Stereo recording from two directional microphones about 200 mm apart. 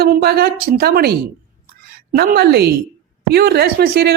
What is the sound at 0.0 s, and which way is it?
Speech, 50° right (ahead or behind).